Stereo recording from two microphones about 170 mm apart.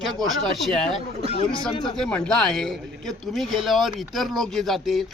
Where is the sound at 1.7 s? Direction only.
30° left (ahead or behind).